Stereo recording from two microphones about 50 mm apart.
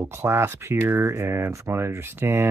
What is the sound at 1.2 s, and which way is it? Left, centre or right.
Speech, right.